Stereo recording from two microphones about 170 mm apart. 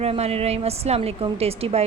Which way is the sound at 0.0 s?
35° right (ahead or behind).